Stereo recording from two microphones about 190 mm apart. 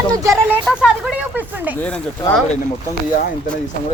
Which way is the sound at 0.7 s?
10° left (ahead or behind).